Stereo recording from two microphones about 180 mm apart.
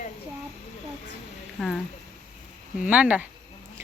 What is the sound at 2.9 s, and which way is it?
Speech, 5° right (ahead or behind).